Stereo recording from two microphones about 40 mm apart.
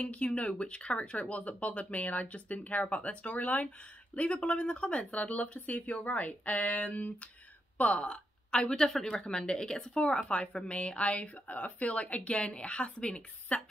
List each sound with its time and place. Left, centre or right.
0.0 s speech: left
4.1 s a woman's voice: left